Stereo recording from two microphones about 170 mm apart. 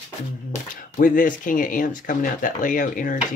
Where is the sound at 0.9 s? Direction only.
55° left (ahead or behind).